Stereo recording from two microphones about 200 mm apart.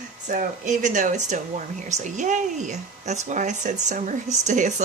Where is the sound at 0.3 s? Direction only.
40° right (ahead or behind).